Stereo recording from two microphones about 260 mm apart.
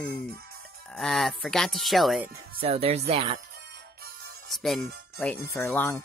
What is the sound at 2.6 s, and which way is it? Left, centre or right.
Speech, right.